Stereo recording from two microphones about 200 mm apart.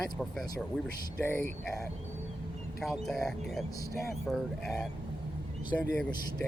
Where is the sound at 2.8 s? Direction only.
Centre (ahead or behind).